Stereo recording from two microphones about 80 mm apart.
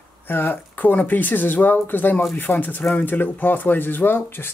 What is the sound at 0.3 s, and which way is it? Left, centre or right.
Speech, left.